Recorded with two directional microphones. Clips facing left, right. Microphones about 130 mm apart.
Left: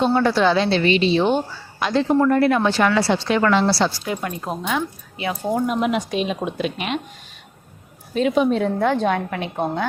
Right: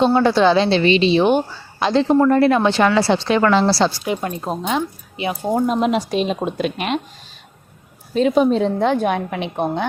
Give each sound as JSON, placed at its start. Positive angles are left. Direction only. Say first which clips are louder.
{"t": 0.0, "sound": "a woman's voice", "louder": "right 3 dB", "side_deg": -25}
{"t": 1.8, "sound": "a woman's voice", "louder": "right 3 dB", "side_deg": -30}
{"t": 6.6, "sound": "speech", "louder": "right 3 dB", "side_deg": -50}
{"t": 8.1, "sound": "a woman's voice", "louder": "right 3 dB", "side_deg": -35}